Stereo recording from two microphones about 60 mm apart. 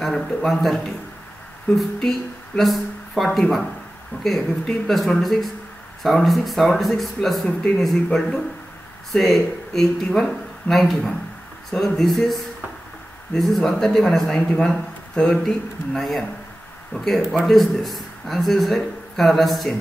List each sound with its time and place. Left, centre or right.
0.0 s a man's voice: centre
1.8 s a man's voice: centre
4.1 s speech: left
4.8 s a man's voice: centre
7.4 s a man's voice: centre